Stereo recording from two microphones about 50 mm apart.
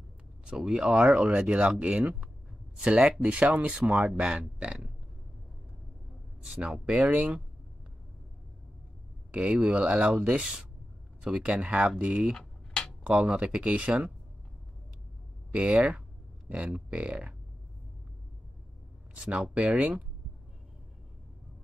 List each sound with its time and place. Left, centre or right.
0.5 s speech: centre
0.8 s speech: right
6.9 s speech: right
9.3 s speech: right
12.4 s a sound: centre
13.0 s speech: right
15.5 s speech: right
19.1 s speech: right